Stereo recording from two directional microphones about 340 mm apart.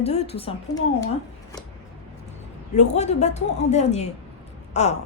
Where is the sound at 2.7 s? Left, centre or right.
Centre.